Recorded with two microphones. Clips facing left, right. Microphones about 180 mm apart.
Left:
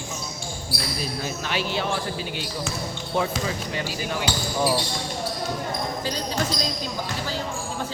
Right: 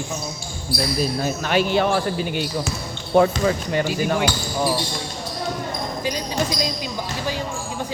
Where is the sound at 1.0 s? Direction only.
50° right (ahead or behind).